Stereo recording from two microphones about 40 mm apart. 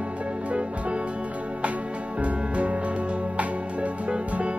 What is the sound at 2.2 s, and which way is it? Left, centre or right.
Music, right.